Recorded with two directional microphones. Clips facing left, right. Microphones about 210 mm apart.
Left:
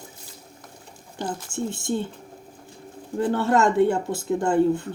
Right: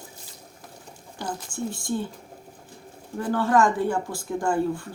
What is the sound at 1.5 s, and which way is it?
Speech, 25° left (ahead or behind).